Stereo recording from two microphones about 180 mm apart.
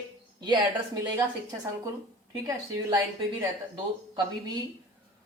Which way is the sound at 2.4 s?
20° right (ahead or behind).